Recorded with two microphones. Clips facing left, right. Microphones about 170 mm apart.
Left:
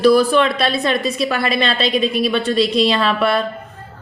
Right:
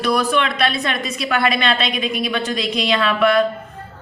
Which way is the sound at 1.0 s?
30° left (ahead or behind).